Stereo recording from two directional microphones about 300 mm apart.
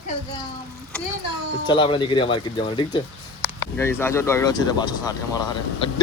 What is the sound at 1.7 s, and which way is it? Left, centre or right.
Speech, centre.